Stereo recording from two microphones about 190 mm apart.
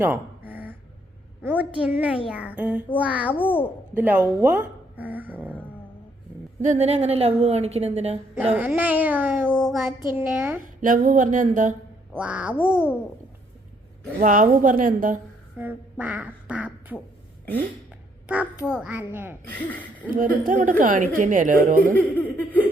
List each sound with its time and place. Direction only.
0.0 s a sound: 10° right (ahead or behind)
1.4 s a child's voice: 10° right (ahead or behind)
3.3 s a child's voice: 10° left (ahead or behind)
3.9 s dog: 10° right (ahead or behind)
6.6 s a woman's voice: 35° right (ahead or behind)
8.5 s speech: 10° right (ahead or behind)
9.5 s speech: centre (ahead or behind)
10.8 s a woman's voice: 45° right (ahead or behind)
12.1 s speech: 5° right (ahead or behind)
14.2 s a woman's voice: 45° right (ahead or behind)
15.5 s speech: 10° right (ahead or behind)
18.8 s speech: 10° right (ahead or behind)
20.1 s a woman's voice: 45° right (ahead or behind)
21.9 s laughter: 10° left (ahead or behind)